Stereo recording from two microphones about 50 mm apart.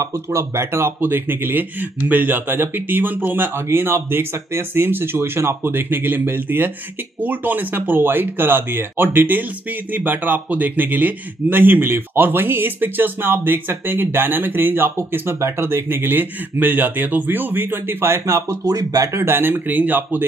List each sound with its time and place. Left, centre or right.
0.0 s speech: right
3.6 s speech: right
19.1 s speech: right